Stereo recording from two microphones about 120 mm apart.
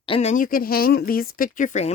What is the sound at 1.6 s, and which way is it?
Speech, 80° left.